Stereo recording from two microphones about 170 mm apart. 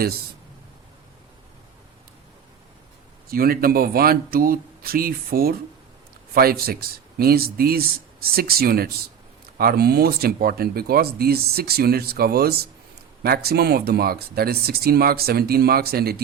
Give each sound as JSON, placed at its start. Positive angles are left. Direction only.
{"t": 3.2, "sound": "speech", "side_deg": -60}